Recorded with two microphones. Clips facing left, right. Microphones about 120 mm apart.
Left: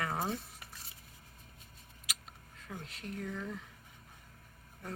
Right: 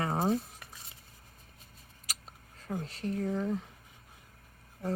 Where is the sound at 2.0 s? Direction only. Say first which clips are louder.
Right 1 dB; 35° right (ahead or behind).